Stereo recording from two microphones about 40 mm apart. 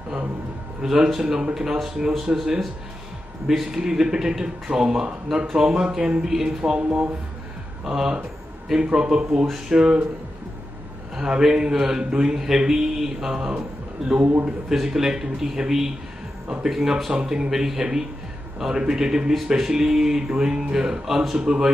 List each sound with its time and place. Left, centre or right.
0.8 s speech: centre
3.4 s speech: centre
7.8 s speech: centre
11.1 s a man's voice: centre